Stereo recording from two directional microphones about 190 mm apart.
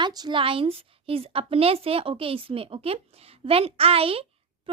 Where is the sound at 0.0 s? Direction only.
20° right (ahead or behind).